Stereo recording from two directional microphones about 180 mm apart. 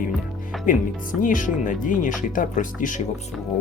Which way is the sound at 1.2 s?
45° left (ahead or behind).